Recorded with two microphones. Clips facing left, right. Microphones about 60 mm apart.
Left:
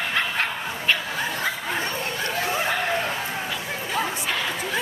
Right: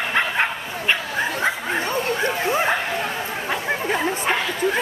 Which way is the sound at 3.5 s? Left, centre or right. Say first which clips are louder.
Right 5 dB; right.